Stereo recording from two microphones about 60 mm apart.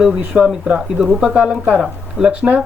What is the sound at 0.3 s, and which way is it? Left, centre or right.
Speech, centre.